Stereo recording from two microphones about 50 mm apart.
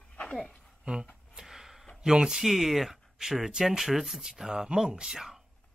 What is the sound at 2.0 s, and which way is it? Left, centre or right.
Speech, centre.